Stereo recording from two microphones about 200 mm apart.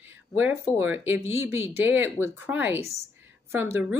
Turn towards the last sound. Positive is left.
turn(degrees=-10)  # may be behind; listen again after turning